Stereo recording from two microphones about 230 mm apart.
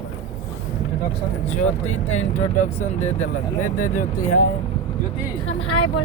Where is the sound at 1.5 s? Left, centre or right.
Left.